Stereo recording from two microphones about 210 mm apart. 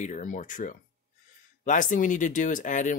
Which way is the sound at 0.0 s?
35° left (ahead or behind).